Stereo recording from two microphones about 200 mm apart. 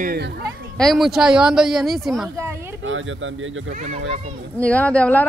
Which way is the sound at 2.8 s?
75° right (ahead or behind).